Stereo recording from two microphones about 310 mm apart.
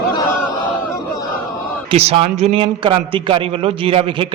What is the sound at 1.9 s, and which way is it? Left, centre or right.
A man's voice, centre.